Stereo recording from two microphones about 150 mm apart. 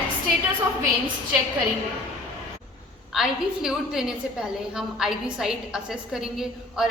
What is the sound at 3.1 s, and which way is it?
A woman's voice, 5° right (ahead or behind).